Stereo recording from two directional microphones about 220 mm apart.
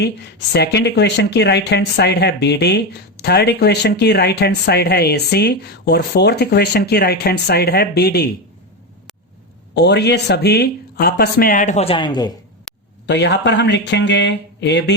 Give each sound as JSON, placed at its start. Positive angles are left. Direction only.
{"t": 0.0, "sound": "speech", "side_deg": 50}
{"t": 9.7, "sound": "speech", "side_deg": 50}
{"t": 13.1, "sound": "speech", "side_deg": 50}